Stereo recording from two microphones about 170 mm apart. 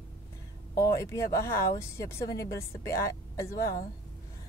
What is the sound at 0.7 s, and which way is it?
Speech, 15° left (ahead or behind).